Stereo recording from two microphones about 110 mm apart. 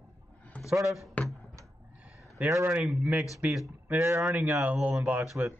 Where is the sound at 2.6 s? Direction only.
10° right (ahead or behind).